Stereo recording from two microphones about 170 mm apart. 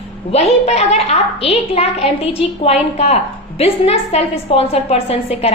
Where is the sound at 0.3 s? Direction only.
40° left (ahead or behind).